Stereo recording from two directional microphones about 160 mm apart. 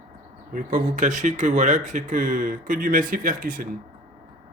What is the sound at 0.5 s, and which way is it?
Speech, 55° right (ahead or behind).